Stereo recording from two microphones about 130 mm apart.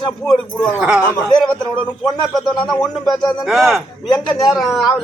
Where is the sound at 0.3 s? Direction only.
5° left (ahead or behind).